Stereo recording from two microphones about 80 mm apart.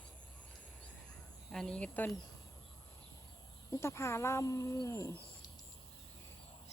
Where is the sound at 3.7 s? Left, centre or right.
Left.